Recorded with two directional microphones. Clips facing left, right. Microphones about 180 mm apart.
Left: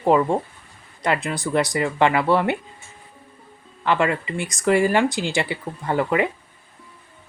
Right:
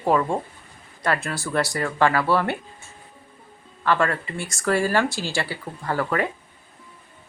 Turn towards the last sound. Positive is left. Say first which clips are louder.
# left 3 dB
turn(degrees=20)  # may be behind; listen again after turning